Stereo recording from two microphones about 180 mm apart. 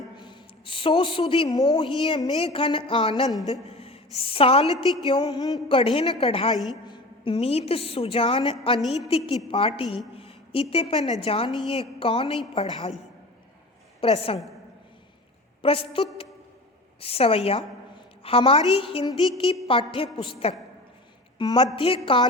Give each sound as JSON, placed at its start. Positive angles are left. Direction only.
{"t": 0.2, "sound": "a woman's voice", "side_deg": 25}
{"t": 10.2, "sound": "a sound", "side_deg": 30}
{"t": 11.1, "sound": "a woman's voice", "side_deg": 30}
{"t": 14.0, "sound": "a woman's voice", "side_deg": 30}
{"t": 15.6, "sound": "a woman's voice", "side_deg": 30}